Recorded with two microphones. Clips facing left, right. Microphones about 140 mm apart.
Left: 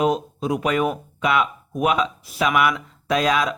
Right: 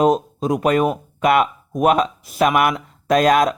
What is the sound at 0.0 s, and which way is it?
Speech, 45° right (ahead or behind).